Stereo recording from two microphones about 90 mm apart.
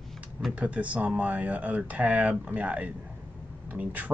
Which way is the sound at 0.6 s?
15° right (ahead or behind).